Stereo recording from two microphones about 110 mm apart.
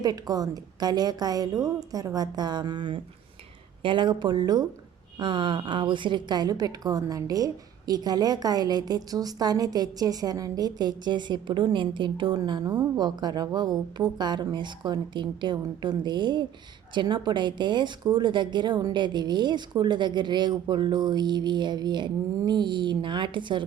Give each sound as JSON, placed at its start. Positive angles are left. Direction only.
{"t": 0.0, "sound": "a woman's voice", "side_deg": -35}